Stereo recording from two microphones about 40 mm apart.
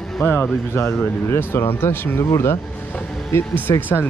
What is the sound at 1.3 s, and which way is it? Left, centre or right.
Speech, left.